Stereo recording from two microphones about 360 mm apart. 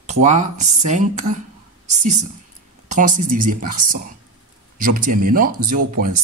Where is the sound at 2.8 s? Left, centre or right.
Right.